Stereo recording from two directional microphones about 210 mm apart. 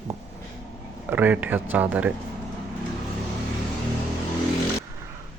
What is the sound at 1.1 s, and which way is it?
Speech, 10° right (ahead or behind).